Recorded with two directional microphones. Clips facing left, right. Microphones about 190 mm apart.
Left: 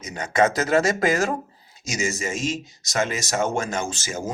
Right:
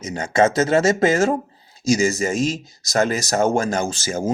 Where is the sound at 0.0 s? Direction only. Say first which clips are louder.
Right 3 dB; 30° right (ahead or behind).